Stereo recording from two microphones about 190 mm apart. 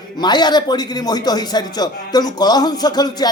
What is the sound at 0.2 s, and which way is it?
A man's voice, 20° left (ahead or behind).